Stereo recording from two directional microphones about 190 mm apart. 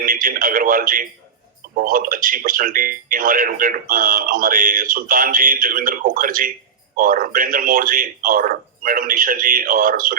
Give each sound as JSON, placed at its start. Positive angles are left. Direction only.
{"t": 0.0, "sound": "radio", "side_deg": -45}
{"t": 1.7, "sound": "speech", "side_deg": -45}